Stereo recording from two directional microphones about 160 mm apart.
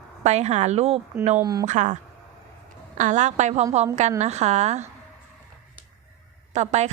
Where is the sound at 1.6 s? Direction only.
50° right (ahead or behind).